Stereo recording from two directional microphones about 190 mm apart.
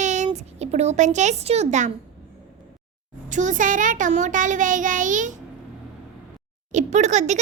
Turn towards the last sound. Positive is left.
turn(degrees=-40)  # may be behind; listen again after turning